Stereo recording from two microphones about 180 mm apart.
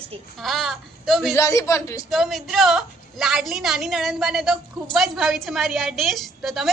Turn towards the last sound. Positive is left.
turn(degrees=0)  # may be behind; listen again after turning